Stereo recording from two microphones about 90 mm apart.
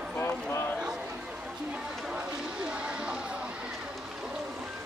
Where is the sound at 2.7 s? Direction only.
10° right (ahead or behind).